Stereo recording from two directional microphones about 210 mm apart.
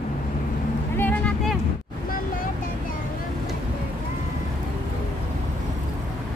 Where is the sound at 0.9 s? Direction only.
10° left (ahead or behind).